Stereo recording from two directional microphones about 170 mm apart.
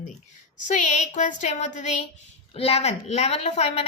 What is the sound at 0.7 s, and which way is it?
A woman's voice, 45° left (ahead or behind).